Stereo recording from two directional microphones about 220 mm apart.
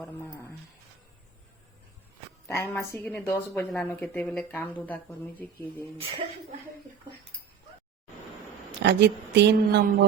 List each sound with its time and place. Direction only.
0.0 s a sound: 10° left (ahead or behind)
2.5 s a woman's voice: 10° left (ahead or behind)
8.8 s speech: 50° right (ahead or behind)